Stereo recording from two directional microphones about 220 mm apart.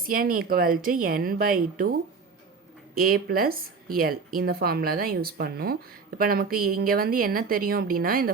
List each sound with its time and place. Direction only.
0.1 s a woman's voice: 40° right (ahead or behind)
2.9 s a woman's voice: 40° right (ahead or behind)